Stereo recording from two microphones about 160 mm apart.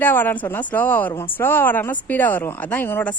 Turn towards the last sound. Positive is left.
turn(degrees=10)  # may be behind; listen again after turning